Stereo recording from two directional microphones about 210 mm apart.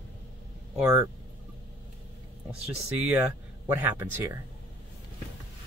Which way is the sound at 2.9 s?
5° right (ahead or behind).